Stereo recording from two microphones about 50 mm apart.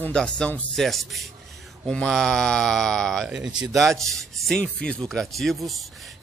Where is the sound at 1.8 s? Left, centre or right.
Centre.